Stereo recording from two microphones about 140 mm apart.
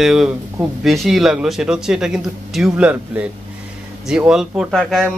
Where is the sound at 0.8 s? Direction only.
Centre (ahead or behind).